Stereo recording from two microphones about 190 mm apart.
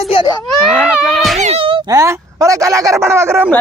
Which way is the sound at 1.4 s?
30° right (ahead or behind).